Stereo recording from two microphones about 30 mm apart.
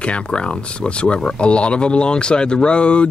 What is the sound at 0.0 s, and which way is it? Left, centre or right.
Speech, left.